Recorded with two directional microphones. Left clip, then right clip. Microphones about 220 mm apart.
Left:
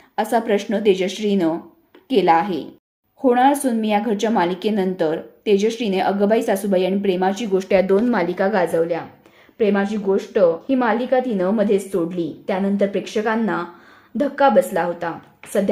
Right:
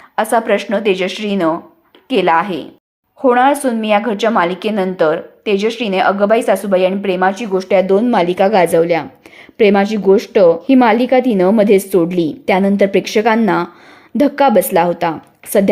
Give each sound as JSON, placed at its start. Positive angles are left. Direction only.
{"t": 0.2, "sound": "a woman's voice", "side_deg": 0}
{"t": 8.5, "sound": "a woman's voice", "side_deg": -30}